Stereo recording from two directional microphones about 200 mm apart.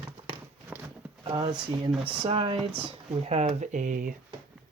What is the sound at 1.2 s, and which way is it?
Speech, 25° right (ahead or behind).